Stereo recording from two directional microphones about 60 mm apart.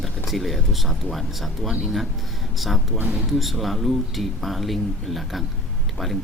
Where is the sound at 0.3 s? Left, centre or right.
Centre.